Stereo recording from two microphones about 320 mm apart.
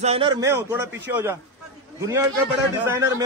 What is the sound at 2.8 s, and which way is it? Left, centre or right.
Speech, centre.